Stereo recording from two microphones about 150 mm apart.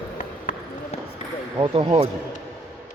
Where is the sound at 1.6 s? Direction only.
35° right (ahead or behind).